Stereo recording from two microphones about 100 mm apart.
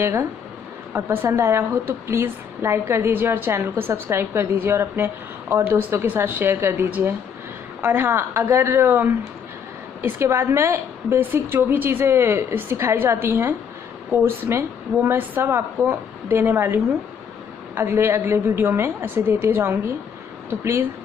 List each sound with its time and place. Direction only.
0.0 s a woman's voice: 25° right (ahead or behind)